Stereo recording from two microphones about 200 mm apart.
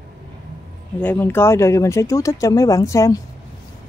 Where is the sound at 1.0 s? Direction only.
10° left (ahead or behind).